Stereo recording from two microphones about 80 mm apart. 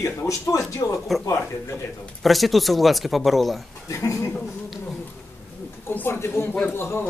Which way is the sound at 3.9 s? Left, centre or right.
Left.